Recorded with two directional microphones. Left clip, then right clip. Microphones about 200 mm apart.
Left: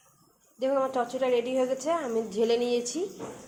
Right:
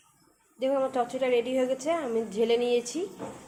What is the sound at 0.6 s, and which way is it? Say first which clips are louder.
A woman's voice: even; 5° left (ahead or behind).